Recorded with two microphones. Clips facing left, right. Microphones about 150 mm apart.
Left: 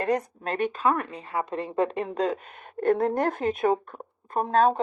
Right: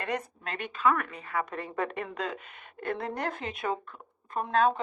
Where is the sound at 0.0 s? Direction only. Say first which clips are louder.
Left 7 dB; 40° left (ahead or behind).